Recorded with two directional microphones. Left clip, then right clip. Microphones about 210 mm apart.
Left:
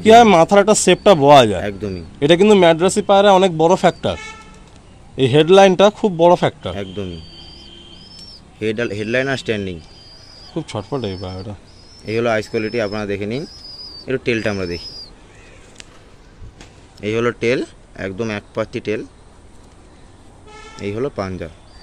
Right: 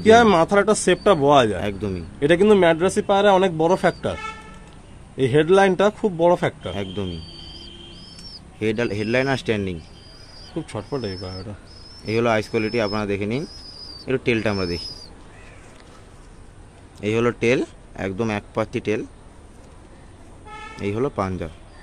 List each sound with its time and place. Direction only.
0.0 s a man's voice: 35° left (ahead or behind)
1.6 s speech: centre (ahead or behind)
2.1 s a man's voice: 35° left (ahead or behind)
6.7 s speech: centre (ahead or behind)
8.5 s speech: centre (ahead or behind)
10.5 s a man's voice: 30° left (ahead or behind)
12.1 s speech: centre (ahead or behind)
17.0 s speech: centre (ahead or behind)
20.7 s speech: 5° right (ahead or behind)